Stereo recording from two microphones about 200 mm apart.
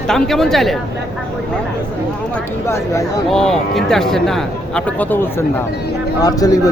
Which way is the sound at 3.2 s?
Centre (ahead or behind).